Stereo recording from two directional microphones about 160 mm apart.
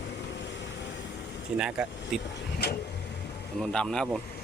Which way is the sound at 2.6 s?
90° left.